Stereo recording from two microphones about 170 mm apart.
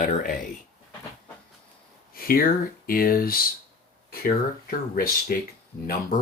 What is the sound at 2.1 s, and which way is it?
Speech, 60° left (ahead or behind).